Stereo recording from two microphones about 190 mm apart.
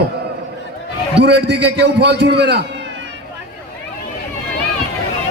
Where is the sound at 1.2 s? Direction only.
60° right (ahead or behind).